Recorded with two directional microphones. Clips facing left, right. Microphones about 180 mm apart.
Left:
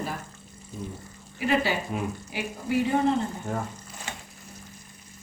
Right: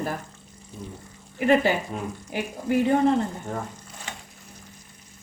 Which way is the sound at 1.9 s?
5° left (ahead or behind).